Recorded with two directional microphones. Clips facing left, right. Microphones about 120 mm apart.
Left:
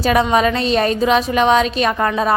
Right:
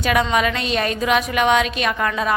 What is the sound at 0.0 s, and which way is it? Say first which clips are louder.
A woman's voice: left 4 dB; 35° left (ahead or behind).